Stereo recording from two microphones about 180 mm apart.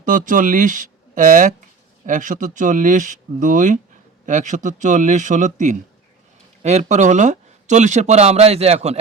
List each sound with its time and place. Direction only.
0.0 s speech: 45° right (ahead or behind)